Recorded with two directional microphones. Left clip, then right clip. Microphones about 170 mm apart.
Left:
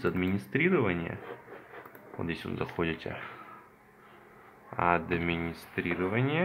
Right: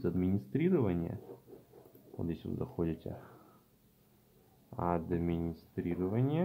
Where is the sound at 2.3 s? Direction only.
10° right (ahead or behind).